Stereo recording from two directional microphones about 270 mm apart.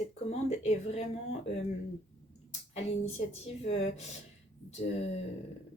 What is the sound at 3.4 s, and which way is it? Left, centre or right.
Speech, left.